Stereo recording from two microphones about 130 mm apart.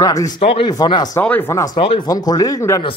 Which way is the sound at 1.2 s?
15° left (ahead or behind).